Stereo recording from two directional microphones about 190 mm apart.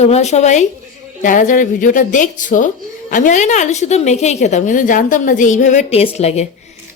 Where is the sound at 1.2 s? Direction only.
45° left (ahead or behind).